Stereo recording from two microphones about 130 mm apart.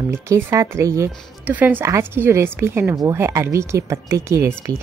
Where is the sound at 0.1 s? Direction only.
20° right (ahead or behind).